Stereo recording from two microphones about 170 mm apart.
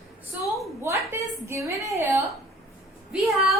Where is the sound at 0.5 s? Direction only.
15° right (ahead or behind).